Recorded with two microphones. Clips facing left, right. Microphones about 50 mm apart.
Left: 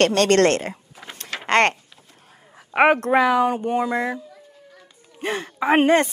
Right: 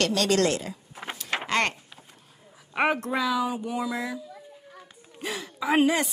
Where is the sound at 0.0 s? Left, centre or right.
Left.